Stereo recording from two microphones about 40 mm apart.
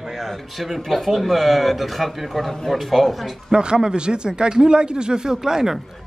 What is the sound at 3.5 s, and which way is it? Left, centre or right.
A man's voice, right.